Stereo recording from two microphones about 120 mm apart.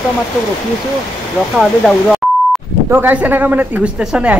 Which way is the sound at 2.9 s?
15° right (ahead or behind).